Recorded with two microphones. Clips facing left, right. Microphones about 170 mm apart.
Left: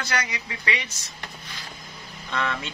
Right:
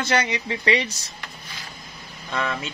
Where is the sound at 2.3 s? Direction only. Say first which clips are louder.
Right 1 dB; 10° right (ahead or behind).